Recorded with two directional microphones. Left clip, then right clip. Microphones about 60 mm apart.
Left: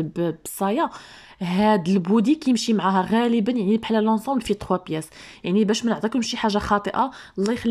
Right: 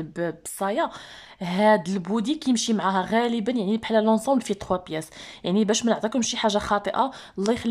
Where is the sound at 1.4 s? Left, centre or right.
Left.